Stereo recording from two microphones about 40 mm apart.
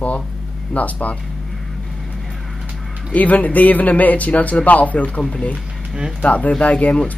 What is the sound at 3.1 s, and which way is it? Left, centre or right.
Speech, left.